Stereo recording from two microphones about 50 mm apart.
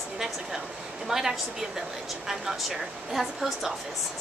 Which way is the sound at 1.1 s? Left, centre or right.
Centre.